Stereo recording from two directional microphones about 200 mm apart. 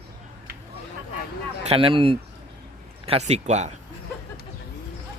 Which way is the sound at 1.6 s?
30° right (ahead or behind).